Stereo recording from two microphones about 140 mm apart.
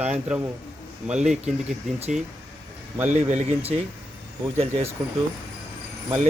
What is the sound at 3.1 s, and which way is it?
Speech, 60° right (ahead or behind).